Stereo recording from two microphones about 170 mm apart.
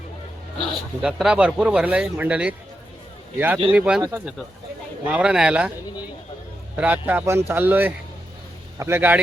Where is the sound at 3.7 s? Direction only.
5° right (ahead or behind).